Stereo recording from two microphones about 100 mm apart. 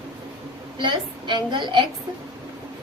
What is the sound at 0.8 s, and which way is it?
A woman's voice, 50° right (ahead or behind).